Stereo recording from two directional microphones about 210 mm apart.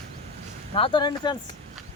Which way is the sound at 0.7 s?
25° left (ahead or behind).